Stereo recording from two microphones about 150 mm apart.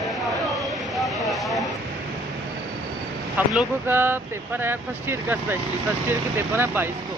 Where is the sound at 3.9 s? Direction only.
15° right (ahead or behind).